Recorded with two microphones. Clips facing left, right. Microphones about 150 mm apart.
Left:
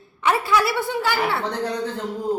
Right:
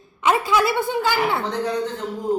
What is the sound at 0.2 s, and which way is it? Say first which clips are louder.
A woman's voice: right 1 dB; 15° right (ahead or behind).